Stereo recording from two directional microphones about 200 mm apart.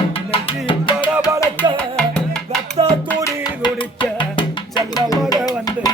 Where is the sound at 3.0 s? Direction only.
15° left (ahead or behind).